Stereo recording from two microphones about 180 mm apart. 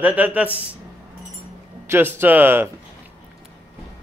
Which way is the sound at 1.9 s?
10° right (ahead or behind).